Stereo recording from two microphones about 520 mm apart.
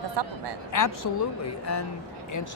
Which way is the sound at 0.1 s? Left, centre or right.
Right.